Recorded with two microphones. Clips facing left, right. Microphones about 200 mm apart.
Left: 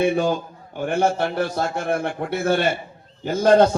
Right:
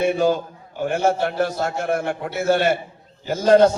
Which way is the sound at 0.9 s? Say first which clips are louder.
Even; 55° left (ahead or behind).